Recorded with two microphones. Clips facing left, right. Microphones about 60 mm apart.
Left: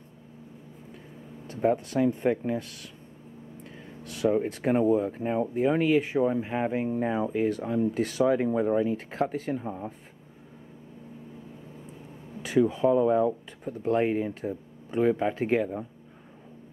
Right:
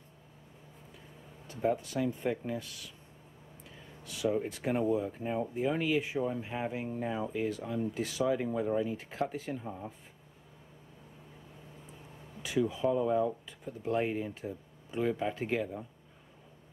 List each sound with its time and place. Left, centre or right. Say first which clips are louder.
1.5 s speech: left 6 dB; left
12.4 s speech: left 7 dB; left